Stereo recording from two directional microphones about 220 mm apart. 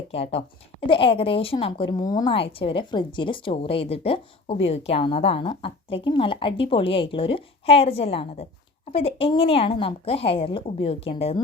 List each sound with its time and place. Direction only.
0.1 s a woman's voice: 30° left (ahead or behind)